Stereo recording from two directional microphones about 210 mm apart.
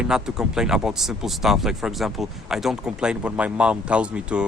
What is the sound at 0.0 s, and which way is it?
Speech, 5° right (ahead or behind).